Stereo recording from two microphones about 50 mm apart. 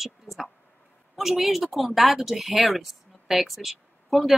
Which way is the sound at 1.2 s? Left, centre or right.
Centre.